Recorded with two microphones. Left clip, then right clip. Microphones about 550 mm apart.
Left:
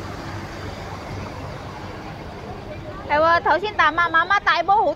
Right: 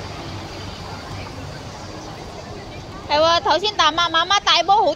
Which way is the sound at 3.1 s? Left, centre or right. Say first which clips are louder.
Right 1 dB; left.